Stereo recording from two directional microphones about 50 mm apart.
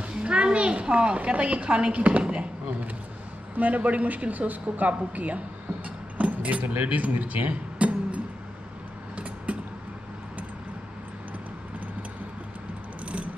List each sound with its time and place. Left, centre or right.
0.2 s a woman's voice: right
6.1 s keys jangling: right
6.6 s speech: right
9.1 s a sound: right
13.0 s keys jangling: right